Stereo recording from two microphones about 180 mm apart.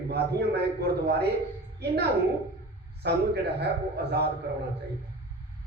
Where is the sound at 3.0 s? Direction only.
65° right (ahead or behind).